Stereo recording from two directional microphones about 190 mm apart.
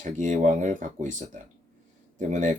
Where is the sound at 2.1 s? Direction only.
40° right (ahead or behind).